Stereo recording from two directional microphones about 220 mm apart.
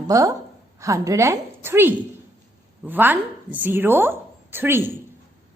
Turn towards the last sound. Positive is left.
turn(degrees=-10)  # may be behind; listen again after turning